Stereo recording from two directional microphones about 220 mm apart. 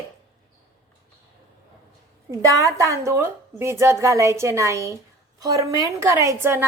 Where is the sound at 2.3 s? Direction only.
15° right (ahead or behind).